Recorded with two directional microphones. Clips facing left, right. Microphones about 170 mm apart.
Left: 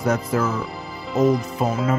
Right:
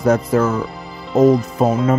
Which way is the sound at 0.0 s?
50° right (ahead or behind).